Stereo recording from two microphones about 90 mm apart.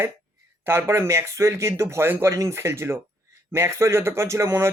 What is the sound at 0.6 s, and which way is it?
Speech, 25° right (ahead or behind).